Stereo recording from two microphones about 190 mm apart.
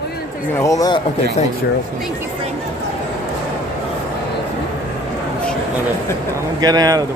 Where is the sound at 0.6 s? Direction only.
15° left (ahead or behind).